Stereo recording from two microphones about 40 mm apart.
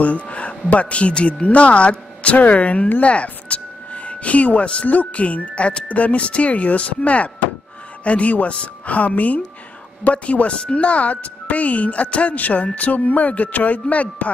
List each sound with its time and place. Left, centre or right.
0.0 s speech: left
3.0 s a sound: left
4.8 s speech: left
8.0 s speech: left